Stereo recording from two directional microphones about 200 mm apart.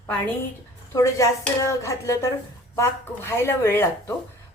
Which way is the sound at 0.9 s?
15° left (ahead or behind).